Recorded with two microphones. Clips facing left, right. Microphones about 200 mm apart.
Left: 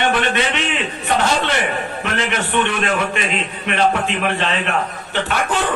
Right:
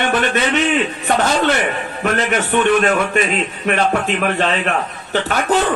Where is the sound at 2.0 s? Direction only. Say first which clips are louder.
Right 7 dB; 45° right (ahead or behind).